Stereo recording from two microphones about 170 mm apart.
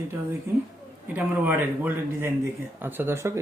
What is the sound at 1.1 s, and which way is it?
Speech, 10° right (ahead or behind).